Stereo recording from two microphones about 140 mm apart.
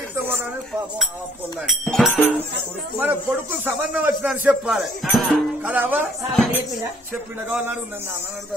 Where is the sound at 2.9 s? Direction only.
15° right (ahead or behind).